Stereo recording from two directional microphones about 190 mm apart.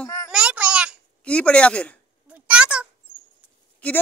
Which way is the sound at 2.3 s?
5° right (ahead or behind).